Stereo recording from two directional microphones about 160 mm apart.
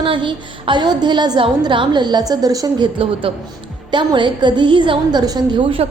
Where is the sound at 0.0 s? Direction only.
30° right (ahead or behind).